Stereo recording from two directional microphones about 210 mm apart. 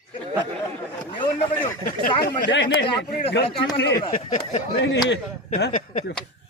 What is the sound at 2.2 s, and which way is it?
Speech, 55° left (ahead or behind).